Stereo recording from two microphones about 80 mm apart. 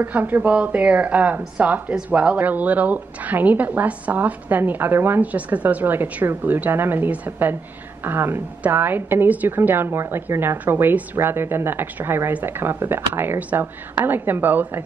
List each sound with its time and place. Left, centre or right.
0.0 s a woman's voice: right